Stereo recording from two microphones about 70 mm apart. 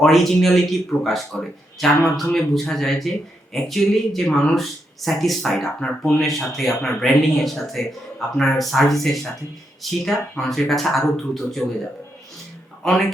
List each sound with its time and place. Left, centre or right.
0.0 s a man's voice: centre
12.8 s a man's voice: centre